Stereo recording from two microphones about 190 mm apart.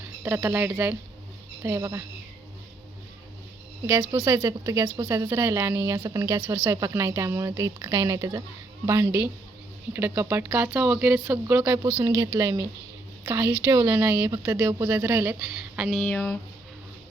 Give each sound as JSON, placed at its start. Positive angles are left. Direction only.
{"t": 0.2, "sound": "speech", "side_deg": -10}
{"t": 4.1, "sound": "speech", "side_deg": -15}
{"t": 15.9, "sound": "speech", "side_deg": 5}